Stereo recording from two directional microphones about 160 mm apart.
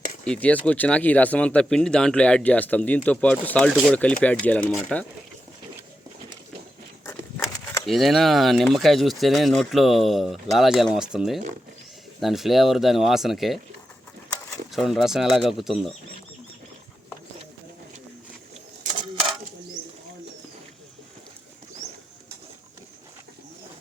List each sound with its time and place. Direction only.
0.3 s speech: 10° left (ahead or behind)
7.0 s a sound: 15° left (ahead or behind)
7.9 s speech: centre (ahead or behind)
14.7 s speech: centre (ahead or behind)
19.8 s bird: 65° right (ahead or behind)